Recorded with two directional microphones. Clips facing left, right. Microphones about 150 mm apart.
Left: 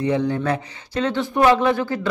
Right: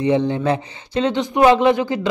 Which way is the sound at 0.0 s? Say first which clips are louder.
Right 3 dB; 20° right (ahead or behind).